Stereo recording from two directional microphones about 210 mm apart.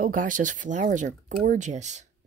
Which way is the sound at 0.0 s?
40° right (ahead or behind).